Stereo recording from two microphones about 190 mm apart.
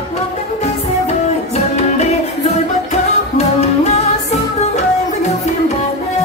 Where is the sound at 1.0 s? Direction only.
35° left (ahead or behind).